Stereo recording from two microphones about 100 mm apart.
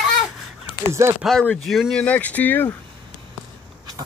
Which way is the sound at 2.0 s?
15° left (ahead or behind).